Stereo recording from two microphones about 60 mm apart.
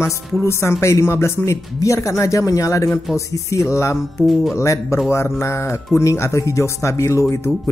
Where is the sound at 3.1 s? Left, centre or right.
Left.